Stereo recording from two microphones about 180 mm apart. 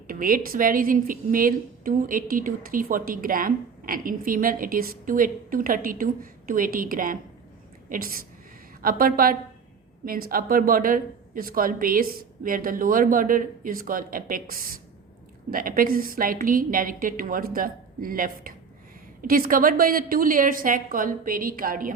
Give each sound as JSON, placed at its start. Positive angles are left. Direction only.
{"t": 0.1, "sound": "a woman's voice", "side_deg": -50}